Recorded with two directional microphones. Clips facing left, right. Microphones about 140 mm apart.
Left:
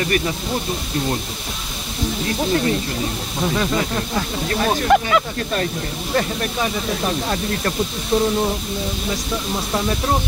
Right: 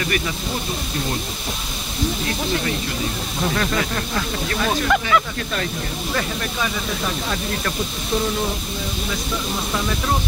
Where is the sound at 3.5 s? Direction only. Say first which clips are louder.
Left 3 dB; 15° left (ahead or behind).